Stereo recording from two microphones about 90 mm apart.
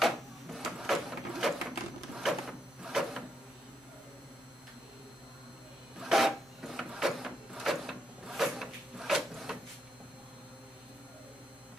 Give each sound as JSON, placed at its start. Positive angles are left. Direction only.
{"t": 0.0, "sound": "printer", "side_deg": 0}
{"t": 5.9, "sound": "printer", "side_deg": -5}